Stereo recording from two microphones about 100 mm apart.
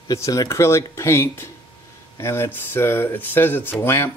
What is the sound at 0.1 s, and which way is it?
Speech, 35° left (ahead or behind).